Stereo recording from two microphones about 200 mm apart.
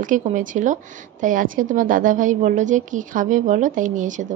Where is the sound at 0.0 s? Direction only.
40° right (ahead or behind).